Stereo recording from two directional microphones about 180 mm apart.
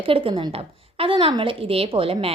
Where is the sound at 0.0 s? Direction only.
30° right (ahead or behind).